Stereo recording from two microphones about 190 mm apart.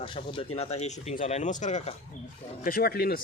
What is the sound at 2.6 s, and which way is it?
Speech, 50° left (ahead or behind).